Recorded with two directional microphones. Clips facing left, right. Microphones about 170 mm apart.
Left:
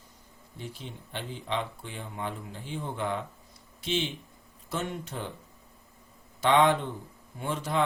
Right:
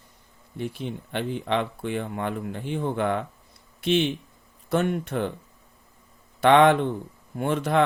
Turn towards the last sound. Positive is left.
turn(degrees=-60)  # may be behind; listen again after turning